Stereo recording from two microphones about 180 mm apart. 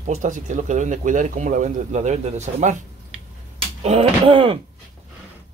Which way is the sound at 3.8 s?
35° right (ahead or behind).